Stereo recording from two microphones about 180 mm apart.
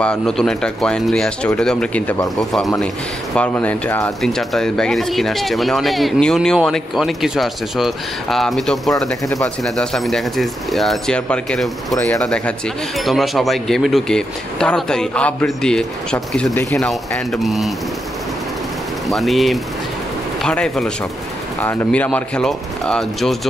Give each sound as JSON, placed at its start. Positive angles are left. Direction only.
{"t": 0.0, "sound": "speech", "side_deg": 5}
{"t": 19.0, "sound": "speech", "side_deg": 0}